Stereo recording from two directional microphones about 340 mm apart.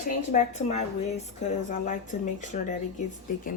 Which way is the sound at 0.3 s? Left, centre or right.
Centre.